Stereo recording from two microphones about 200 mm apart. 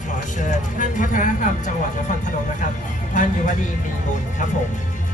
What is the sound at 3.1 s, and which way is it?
Speech, 40° left (ahead or behind).